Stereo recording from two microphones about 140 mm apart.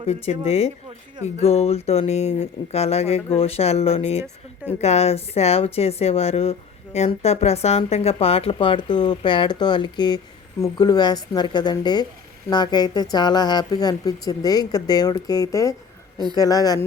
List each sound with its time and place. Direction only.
0.1 s speech: 50° left (ahead or behind); by 16.8 s 25° left (ahead or behind)